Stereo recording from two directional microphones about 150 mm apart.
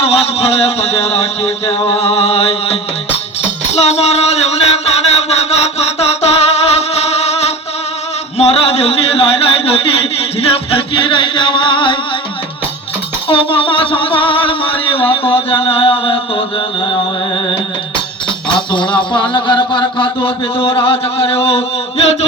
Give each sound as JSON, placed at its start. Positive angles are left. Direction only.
{"t": 0.0, "sound": "a man's voice", "side_deg": 40}
{"t": 3.7, "sound": "music", "side_deg": 50}
{"t": 8.4, "sound": "a sound", "side_deg": 45}
{"t": 10.7, "sound": "music", "side_deg": 35}
{"t": 13.2, "sound": "a sound", "side_deg": 35}
{"t": 18.7, "sound": "a man's voice", "side_deg": 30}